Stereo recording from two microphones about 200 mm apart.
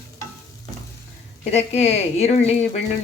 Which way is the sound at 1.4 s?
35° left (ahead or behind).